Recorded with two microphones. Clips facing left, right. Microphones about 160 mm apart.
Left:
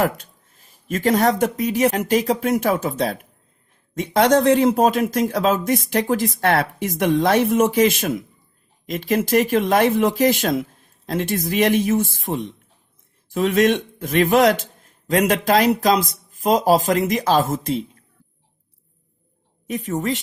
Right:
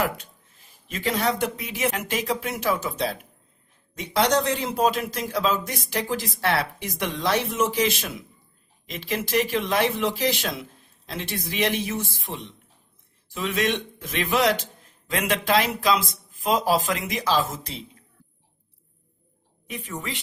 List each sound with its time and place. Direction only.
0.9 s speech: 45° left (ahead or behind)
19.6 s speech: 45° left (ahead or behind)